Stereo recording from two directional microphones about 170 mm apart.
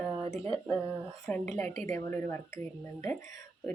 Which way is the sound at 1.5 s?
5° left (ahead or behind).